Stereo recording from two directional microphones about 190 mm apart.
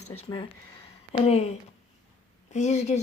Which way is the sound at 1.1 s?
35° left (ahead or behind).